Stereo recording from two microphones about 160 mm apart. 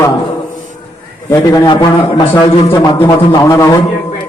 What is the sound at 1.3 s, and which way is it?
A man's voice, 25° left (ahead or behind).